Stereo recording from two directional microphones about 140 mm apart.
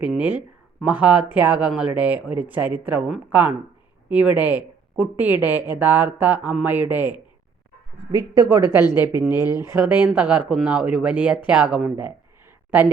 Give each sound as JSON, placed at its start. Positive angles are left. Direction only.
{"t": 0.0, "sound": "speech", "side_deg": -10}
{"t": 8.1, "sound": "speech", "side_deg": -25}